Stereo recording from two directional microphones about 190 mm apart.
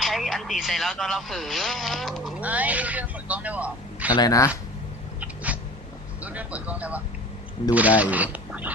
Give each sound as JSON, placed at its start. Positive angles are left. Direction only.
{"t": 0.0, "sound": "speech", "side_deg": 0}
{"t": 4.1, "sound": "speech", "side_deg": 20}
{"t": 5.2, "sound": "cat", "side_deg": -10}
{"t": 6.2, "sound": "speech", "side_deg": -5}